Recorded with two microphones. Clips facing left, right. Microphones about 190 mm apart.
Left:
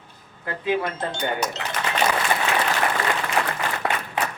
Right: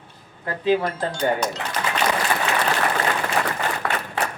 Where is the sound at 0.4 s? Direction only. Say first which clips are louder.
Right 4 dB; 30° right (ahead or behind).